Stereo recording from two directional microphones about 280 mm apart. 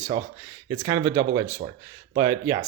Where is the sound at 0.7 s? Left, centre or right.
Centre.